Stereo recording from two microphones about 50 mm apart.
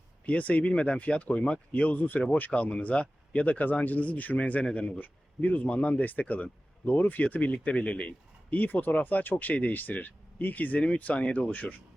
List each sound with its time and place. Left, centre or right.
0.3 s speech: left
2.0 s speech: left
2.3 s speech: left
4.6 s speech: centre
4.9 s speech: left
11.5 s speech: left